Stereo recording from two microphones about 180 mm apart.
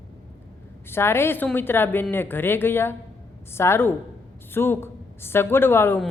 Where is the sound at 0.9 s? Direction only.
15° left (ahead or behind).